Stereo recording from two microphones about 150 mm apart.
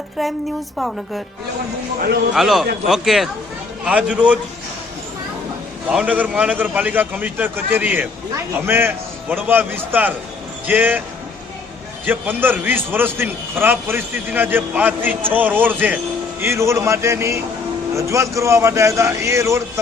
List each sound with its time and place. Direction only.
0.2 s speech: centre (ahead or behind)
2.3 s a man's voice: centre (ahead or behind)
5.9 s a man's voice: 10° right (ahead or behind)
12.0 s a man's voice: 10° right (ahead or behind)